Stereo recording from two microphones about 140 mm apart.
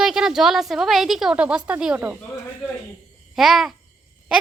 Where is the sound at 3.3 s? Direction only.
5° right (ahead or behind).